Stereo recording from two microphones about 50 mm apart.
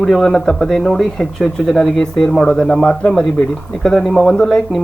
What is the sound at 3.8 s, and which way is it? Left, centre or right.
Speech, centre.